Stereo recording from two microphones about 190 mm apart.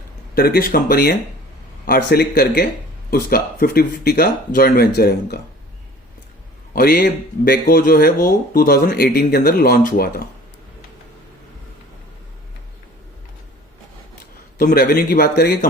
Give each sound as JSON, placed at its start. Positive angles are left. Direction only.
{"t": 0.3, "sound": "speech", "side_deg": 50}
{"t": 6.7, "sound": "speech", "side_deg": 50}
{"t": 14.6, "sound": "speech", "side_deg": 50}